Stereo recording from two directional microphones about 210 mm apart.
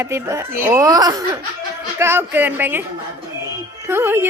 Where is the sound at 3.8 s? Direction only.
10° right (ahead or behind).